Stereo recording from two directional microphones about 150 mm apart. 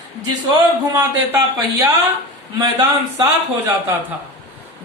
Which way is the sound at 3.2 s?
20° right (ahead or behind).